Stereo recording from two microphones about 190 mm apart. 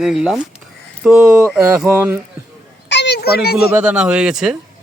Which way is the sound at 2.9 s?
65° left (ahead or behind).